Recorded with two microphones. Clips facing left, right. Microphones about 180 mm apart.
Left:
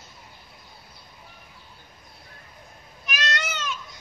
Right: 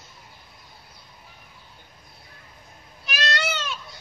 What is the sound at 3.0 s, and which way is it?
Cat, 35° right (ahead or behind).